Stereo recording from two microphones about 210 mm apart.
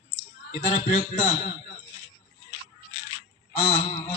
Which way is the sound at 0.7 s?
35° left (ahead or behind).